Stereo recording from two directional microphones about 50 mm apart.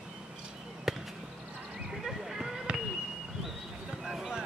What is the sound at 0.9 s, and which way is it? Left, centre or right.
Basketball bounce, centre.